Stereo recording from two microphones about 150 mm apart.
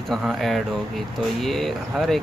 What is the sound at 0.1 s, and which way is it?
Speech, centre (ahead or behind).